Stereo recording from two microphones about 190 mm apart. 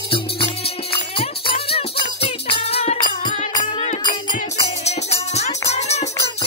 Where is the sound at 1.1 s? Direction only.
30° left (ahead or behind).